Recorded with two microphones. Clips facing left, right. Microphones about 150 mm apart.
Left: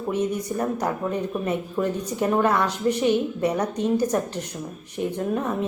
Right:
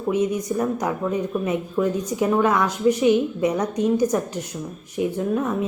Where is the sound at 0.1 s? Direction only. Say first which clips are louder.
Right 4 dB; 10° right (ahead or behind).